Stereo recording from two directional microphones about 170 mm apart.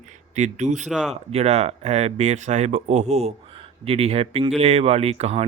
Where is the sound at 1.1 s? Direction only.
40° right (ahead or behind).